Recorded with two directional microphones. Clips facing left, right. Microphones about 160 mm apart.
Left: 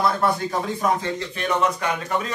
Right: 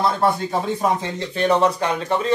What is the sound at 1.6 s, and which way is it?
Speech, 30° right (ahead or behind).